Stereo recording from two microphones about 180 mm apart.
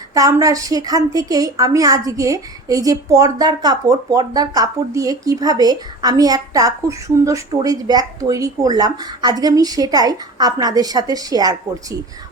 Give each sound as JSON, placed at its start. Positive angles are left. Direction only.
{"t": 0.1, "sound": "a woman's voice", "side_deg": -20}